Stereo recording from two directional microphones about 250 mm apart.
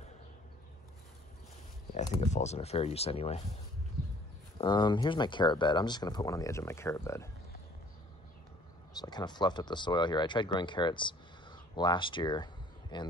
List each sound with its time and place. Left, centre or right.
2.0 s speech: left
4.6 s speech: centre
9.0 s speech: centre